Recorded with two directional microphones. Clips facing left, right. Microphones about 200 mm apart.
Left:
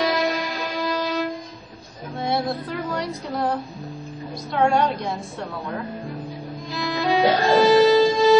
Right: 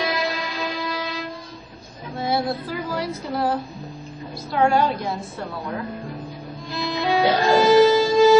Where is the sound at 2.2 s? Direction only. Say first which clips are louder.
Right 1 dB; centre (ahead or behind).